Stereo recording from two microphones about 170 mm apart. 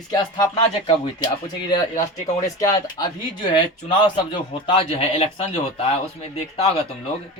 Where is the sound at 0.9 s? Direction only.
25° left (ahead or behind).